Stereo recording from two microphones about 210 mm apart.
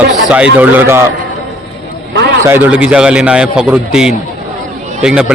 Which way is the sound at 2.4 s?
10° right (ahead or behind).